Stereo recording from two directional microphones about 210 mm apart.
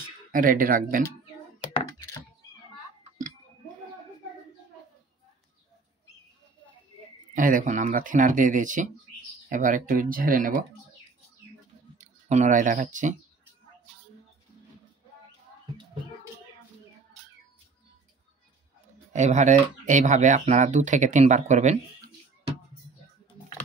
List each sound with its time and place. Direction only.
0.3 s speech: 40° right (ahead or behind)
3.0 s a sound: 40° right (ahead or behind)
7.3 s speech: 40° right (ahead or behind)
12.0 s speech: 35° right (ahead or behind)
19.1 s speech: 35° right (ahead or behind)